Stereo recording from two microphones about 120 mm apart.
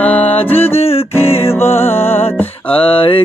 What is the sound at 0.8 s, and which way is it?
Music, 55° left (ahead or behind).